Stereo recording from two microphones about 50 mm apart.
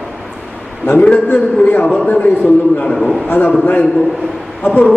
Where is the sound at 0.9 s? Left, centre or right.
Left.